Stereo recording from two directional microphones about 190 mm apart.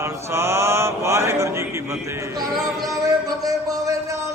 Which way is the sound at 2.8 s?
20° right (ahead or behind).